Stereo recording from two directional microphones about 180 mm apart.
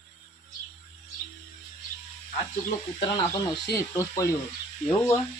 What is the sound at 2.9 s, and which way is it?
Speech, 30° left (ahead or behind).